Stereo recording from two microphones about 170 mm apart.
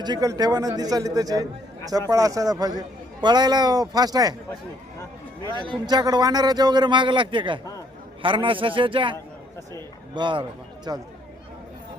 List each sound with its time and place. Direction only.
0.0 s a man's voice: 25° right (ahead or behind)
5.6 s a man's voice: 25° right (ahead or behind)